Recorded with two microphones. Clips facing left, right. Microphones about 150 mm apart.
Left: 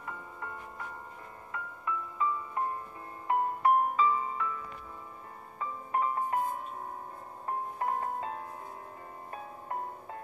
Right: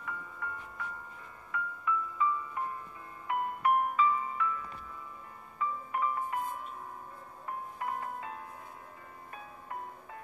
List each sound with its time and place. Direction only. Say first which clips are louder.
1.5 s music: right 3 dB; 35° left (ahead or behind)
5.6 s music: left 1 dB; 40° left (ahead or behind)
7.4 s music: left 5 dB; 40° left (ahead or behind)